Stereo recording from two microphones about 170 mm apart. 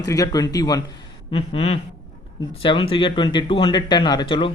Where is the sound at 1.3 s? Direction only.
35° left (ahead or behind).